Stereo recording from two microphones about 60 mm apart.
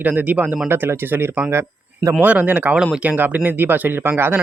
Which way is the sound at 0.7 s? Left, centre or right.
Right.